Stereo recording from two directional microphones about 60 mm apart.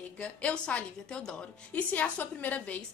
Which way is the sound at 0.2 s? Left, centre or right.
Left.